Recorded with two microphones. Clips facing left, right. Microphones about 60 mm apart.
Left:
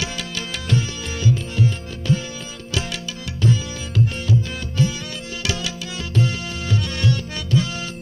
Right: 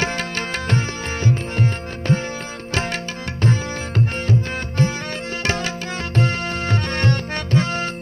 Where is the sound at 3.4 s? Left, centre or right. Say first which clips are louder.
Even; right.